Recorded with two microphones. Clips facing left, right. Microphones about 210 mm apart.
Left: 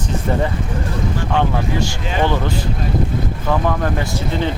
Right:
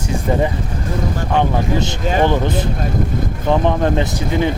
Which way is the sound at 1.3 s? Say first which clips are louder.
Right 3 dB; 15° right (ahead or behind).